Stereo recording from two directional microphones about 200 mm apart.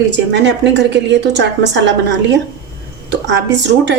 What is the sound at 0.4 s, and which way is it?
Speech, 60° right (ahead or behind).